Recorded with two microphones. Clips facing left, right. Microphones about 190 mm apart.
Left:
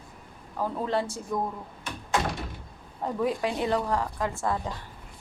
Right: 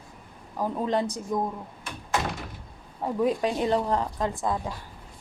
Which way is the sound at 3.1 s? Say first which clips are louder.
Right 3 dB; 20° right (ahead or behind).